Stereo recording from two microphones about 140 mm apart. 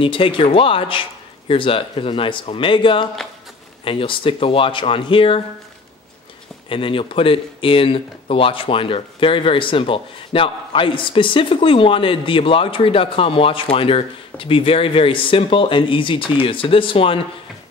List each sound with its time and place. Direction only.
0.0 s speech: 40° left (ahead or behind)
6.7 s speech: 40° left (ahead or behind)